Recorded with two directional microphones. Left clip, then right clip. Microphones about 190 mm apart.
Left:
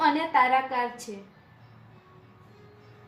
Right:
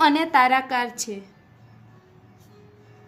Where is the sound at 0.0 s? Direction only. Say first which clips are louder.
Right 5 dB; 55° right (ahead or behind).